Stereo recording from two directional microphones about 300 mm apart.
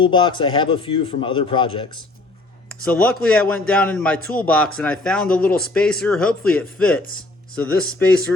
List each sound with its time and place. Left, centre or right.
0.0 s a man's voice: centre
2.8 s speech: centre